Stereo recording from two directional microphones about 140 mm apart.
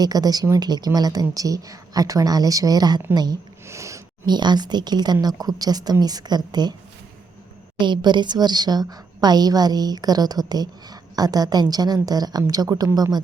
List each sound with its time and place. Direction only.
0.0 s a woman's voice: 25° right (ahead or behind)
7.8 s a woman's voice: 35° right (ahead or behind)